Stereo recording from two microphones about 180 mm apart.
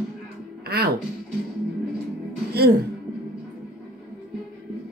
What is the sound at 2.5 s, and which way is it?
Speech, 60° right (ahead or behind).